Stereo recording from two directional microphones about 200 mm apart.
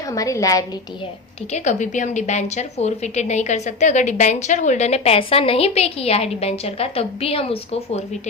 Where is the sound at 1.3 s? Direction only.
35° left (ahead or behind).